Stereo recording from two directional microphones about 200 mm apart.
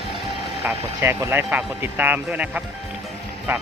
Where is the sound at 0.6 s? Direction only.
10° right (ahead or behind).